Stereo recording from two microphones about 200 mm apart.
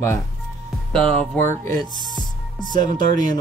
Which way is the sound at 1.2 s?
15° left (ahead or behind).